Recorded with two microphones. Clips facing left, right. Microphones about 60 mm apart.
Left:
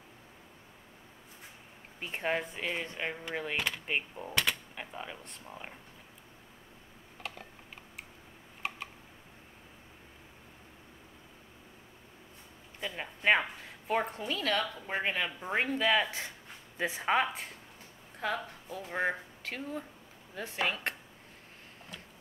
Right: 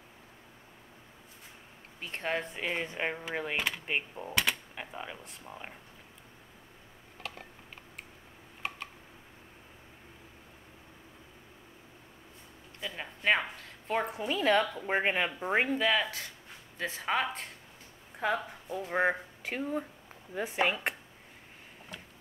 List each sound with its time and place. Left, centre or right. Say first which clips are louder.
2.0 s speech: left 1 dB; centre
7.2 s typing: even; centre
8.6 s tick: even; centre
12.8 s a sound: left 1 dB; centre
13.9 s speech: even; centre
14.2 s speech: right 5 dB; centre
15.8 s speech: even; centre
16.1 s speech: left 1 dB; left
18.2 s speech: right 3 dB; centre